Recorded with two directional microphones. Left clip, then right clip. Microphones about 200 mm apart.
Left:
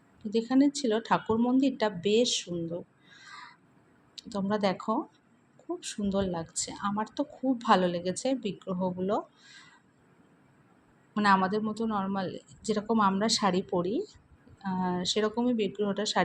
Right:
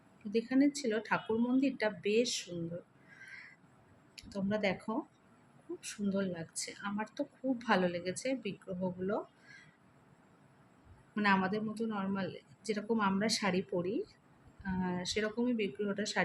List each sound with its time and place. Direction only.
0.3 s speech: 20° left (ahead or behind)
4.1 s speech: 20° left (ahead or behind)
11.1 s speech: 20° left (ahead or behind)